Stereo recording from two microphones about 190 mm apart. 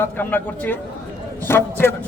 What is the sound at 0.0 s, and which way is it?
A man's voice, 10° left (ahead or behind).